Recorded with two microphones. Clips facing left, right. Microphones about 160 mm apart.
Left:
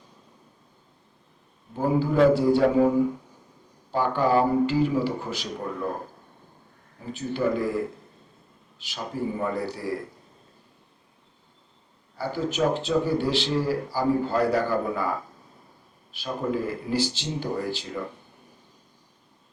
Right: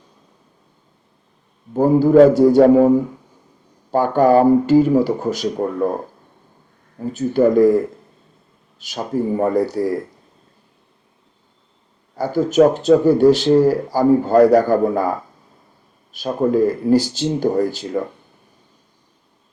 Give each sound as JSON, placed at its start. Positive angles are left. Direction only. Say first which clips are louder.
{"t": 1.7, "sound": "speech", "louder": "right 11 dB", "side_deg": -45}
{"t": 3.9, "sound": "speech", "louder": "right 9 dB", "side_deg": -45}
{"t": 7.1, "sound": "speech", "louder": "right 11 dB", "side_deg": -40}
{"t": 8.8, "sound": "speech", "louder": "right 9 dB", "side_deg": -45}
{"t": 12.1, "sound": "speech", "louder": "right 12 dB", "side_deg": -45}
{"t": 16.1, "sound": "speech", "louder": "right 11 dB", "side_deg": -45}